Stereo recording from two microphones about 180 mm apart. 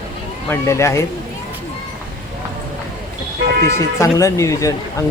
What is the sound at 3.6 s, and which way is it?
A man's voice, 15° left (ahead or behind).